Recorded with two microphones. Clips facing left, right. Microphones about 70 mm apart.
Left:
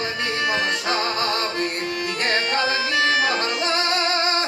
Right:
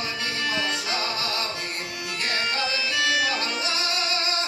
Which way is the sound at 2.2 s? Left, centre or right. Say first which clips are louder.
Left 5 dB; left.